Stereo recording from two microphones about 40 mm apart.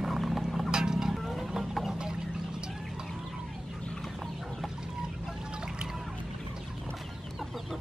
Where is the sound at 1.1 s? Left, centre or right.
Centre.